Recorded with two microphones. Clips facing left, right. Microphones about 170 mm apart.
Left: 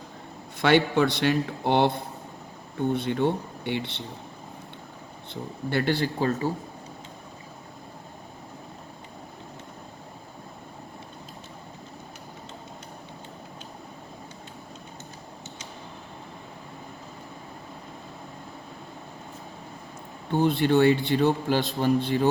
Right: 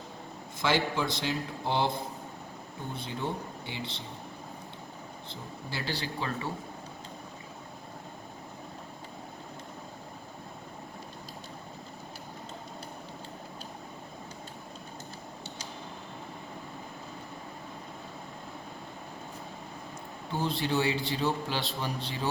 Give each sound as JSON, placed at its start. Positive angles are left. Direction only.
{"t": 0.6, "sound": "a man's voice", "side_deg": 65}
{"t": 5.3, "sound": "a man's voice", "side_deg": 60}
{"t": 20.3, "sound": "a man's voice", "side_deg": 60}